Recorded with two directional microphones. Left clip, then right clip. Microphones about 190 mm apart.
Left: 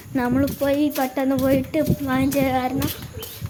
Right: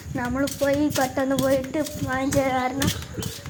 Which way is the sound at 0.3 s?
30° left (ahead or behind).